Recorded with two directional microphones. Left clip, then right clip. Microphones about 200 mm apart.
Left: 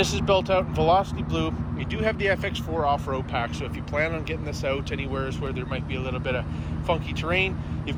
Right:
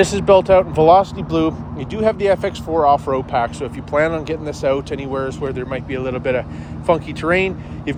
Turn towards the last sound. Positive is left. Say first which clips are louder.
# right 8 dB
turn(degrees=-40)  # may be behind; listen again after turning